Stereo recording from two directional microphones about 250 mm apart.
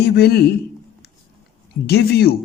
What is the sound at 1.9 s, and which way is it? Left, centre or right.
Speech, left.